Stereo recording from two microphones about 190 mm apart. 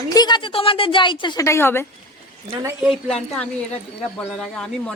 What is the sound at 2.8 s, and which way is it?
Speech, centre (ahead or behind).